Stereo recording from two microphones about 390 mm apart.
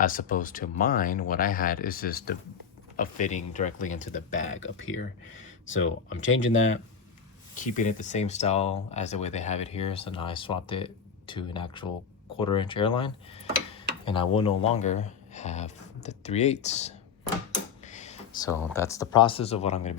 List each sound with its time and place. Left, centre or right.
0.0 s speech: left
4.8 s speech: left
7.5 s speech: centre
17.8 s a sound: centre
18.7 s speech: centre